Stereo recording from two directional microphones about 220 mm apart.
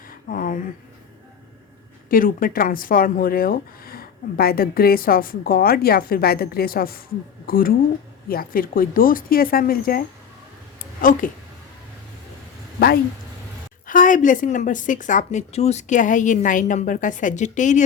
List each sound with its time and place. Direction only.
0.1 s a sound: 40° left (ahead or behind)
2.0 s speech: 40° left (ahead or behind)
11.0 s speech: 35° left (ahead or behind)
13.8 s speech: 35° left (ahead or behind)